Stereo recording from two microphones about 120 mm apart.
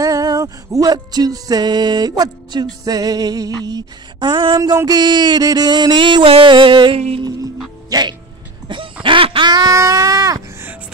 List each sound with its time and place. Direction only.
0.0 s music: 30° right (ahead or behind)
7.9 s speech: 35° right (ahead or behind)
9.0 s music: 45° right (ahead or behind); by 10.4 s 30° right (ahead or behind)